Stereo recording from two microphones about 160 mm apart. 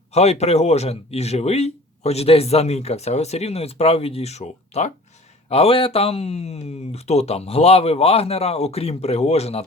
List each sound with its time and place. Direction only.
0.1 s speech: 40° left (ahead or behind)